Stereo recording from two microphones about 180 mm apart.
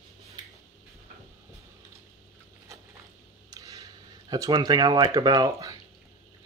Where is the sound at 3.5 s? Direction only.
20° right (ahead or behind).